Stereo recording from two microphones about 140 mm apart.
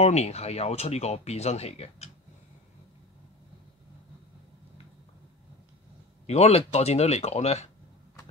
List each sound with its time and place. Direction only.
0.0 s speech: 50° left (ahead or behind)
6.2 s speech: 50° left (ahead or behind)